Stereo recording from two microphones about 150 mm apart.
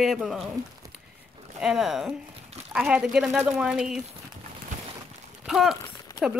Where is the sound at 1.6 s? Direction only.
Centre (ahead or behind).